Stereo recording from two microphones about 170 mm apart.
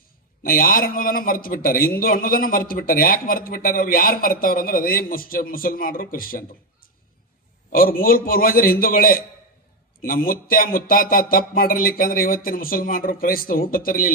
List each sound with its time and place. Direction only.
0.4 s a man's voice: 55° left (ahead or behind)
7.7 s a man's voice: 55° left (ahead or behind)